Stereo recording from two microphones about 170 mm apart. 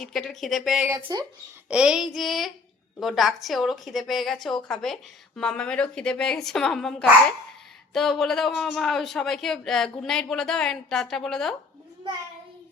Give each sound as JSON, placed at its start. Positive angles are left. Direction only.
{"t": 0.0, "sound": "a man's voice", "side_deg": 0}
{"t": 0.9, "sound": "speech", "side_deg": -25}
{"t": 1.7, "sound": "a man's voice", "side_deg": -5}